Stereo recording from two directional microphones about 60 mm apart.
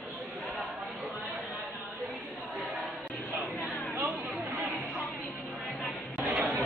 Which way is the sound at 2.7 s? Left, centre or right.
Centre.